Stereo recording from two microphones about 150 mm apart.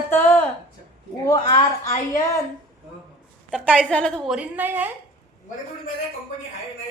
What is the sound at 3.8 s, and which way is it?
Speech, 5° left (ahead or behind).